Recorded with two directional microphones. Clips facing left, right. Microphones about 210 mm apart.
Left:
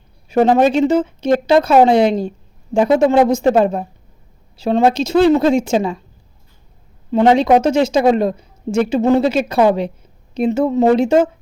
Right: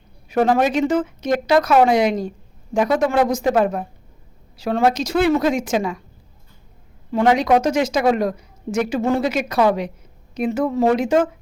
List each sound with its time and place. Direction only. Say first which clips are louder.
0.3 s a woman's voice: left 5 dB; 25° left (ahead or behind)
7.1 s a woman's voice: left 4 dB; 25° left (ahead or behind)